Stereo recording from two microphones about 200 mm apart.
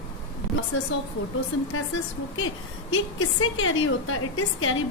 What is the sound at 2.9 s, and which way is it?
A woman's voice, 90° left.